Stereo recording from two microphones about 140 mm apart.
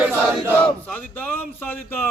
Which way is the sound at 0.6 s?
10° left (ahead or behind).